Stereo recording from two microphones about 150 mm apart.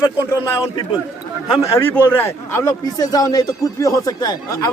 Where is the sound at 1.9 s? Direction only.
15° left (ahead or behind).